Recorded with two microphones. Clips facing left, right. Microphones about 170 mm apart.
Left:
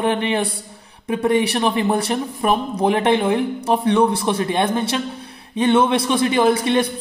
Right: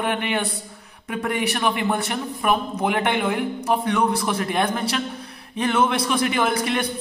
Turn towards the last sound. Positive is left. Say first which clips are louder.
# left 6 dB
turn(degrees=30)  # may be behind; listen again after turning